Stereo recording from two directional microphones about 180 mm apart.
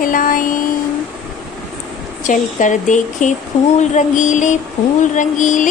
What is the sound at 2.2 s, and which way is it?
Music, 45° left (ahead or behind).